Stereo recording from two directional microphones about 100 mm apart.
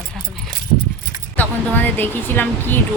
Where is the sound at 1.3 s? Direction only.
15° left (ahead or behind).